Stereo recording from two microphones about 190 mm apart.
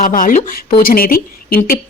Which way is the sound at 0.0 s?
45° left (ahead or behind).